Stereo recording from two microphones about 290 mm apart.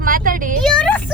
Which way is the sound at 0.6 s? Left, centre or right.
Centre.